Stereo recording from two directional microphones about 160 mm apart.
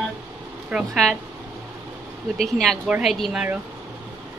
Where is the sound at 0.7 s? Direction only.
Centre (ahead or behind).